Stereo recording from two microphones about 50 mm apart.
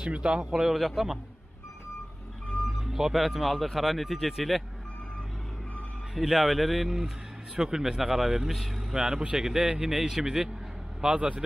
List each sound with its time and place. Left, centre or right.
0.0 s speech: centre
2.8 s speech: centre
6.1 s speech: centre; by 11.4 s right